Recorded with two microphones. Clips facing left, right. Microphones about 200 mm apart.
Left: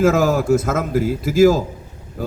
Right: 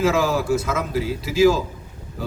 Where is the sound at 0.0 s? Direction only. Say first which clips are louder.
Left 4 dB; 50° left (ahead or behind).